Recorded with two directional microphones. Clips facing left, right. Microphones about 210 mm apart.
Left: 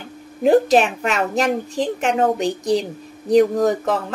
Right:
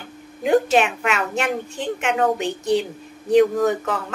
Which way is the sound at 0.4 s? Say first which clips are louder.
Left 3 dB; 35° left (ahead or behind).